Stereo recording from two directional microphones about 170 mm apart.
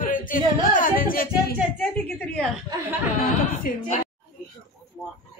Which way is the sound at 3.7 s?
55° left (ahead or behind).